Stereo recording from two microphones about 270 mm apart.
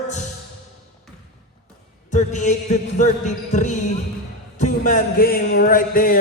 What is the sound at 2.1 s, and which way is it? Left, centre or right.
Music, left.